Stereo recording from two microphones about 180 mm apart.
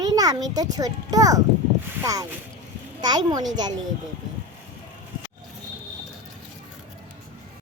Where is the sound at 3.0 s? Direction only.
25° right (ahead or behind).